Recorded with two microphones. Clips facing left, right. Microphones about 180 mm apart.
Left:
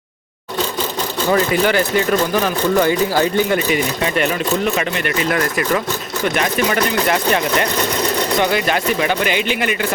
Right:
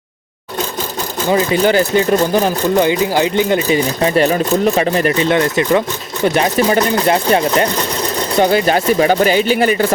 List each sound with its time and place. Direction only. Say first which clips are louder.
1.6 s speech: right 4 dB; 30° right (ahead or behind)